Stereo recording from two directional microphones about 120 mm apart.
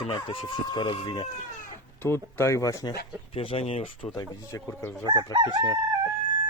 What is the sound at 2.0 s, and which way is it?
Speech, 20° left (ahead or behind).